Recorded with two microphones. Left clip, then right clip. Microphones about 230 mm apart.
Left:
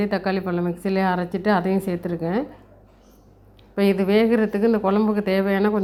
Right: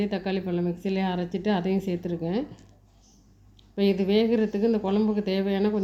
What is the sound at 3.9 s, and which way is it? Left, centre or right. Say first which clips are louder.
Speech: left 5 dB; centre.